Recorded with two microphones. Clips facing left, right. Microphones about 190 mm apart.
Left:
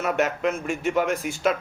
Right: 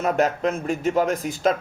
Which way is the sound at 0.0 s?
35° right (ahead or behind).